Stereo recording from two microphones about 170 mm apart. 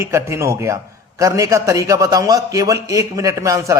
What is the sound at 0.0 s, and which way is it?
Speech, 15° right (ahead or behind).